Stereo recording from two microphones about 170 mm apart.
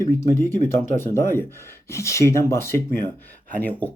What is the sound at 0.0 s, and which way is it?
Speech, 15° left (ahead or behind).